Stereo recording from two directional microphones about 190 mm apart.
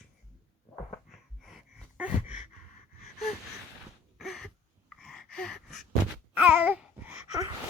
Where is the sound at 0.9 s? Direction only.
Centre (ahead or behind).